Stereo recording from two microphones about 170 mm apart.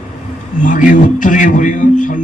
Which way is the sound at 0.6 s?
50° left (ahead or behind).